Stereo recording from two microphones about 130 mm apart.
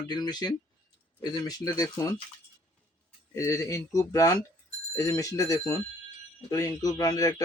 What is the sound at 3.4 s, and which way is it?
Speech, 25° left (ahead or behind).